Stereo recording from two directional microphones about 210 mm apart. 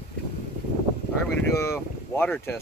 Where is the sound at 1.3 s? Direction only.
15° left (ahead or behind).